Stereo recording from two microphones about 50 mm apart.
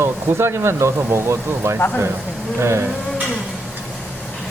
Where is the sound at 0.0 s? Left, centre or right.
Right.